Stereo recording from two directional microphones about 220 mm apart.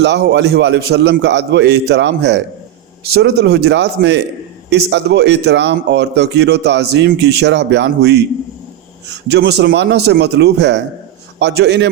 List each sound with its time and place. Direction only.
0.0 s speech: 50° right (ahead or behind)